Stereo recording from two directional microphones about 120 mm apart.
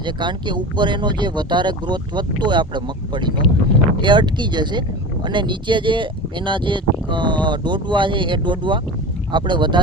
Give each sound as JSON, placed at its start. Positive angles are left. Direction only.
{"t": 0.0, "sound": "speech", "side_deg": -40}